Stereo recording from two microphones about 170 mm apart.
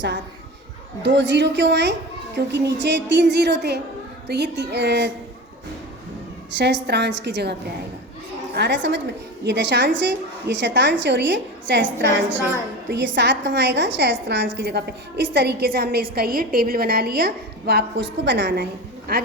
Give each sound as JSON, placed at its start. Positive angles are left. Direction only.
{"t": 1.0, "sound": "a woman's voice", "side_deg": -90}
{"t": 6.5, "sound": "a woman's voice", "side_deg": -90}
{"t": 8.5, "sound": "a woman's voice", "side_deg": -85}
{"t": 14.6, "sound": "a woman's voice", "side_deg": -75}
{"t": 18.3, "sound": "a woman's voice", "side_deg": -90}